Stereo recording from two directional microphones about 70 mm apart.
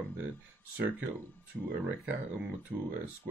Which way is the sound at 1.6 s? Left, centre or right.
Right.